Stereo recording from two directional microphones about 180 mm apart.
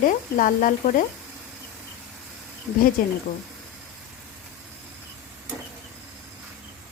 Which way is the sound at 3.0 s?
50° left (ahead or behind).